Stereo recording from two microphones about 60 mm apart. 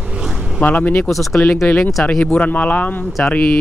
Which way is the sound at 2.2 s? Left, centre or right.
Left.